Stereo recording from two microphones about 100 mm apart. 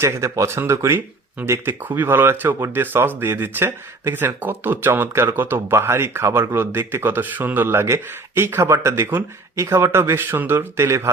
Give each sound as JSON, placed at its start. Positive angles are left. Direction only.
{"t": 0.0, "sound": "speech", "side_deg": -30}